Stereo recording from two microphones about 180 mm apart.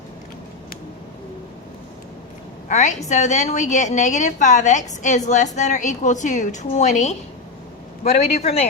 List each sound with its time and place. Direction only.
2.6 s a woman's voice: 40° left (ahead or behind)